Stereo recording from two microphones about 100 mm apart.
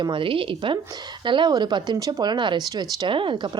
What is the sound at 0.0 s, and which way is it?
Speech, 60° right (ahead or behind).